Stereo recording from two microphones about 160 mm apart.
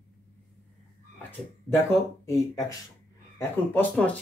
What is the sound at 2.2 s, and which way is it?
Speech, 20° left (ahead or behind).